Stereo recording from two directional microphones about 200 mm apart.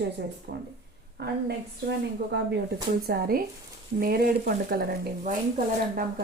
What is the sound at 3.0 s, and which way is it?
A woman's voice, 50° right (ahead or behind).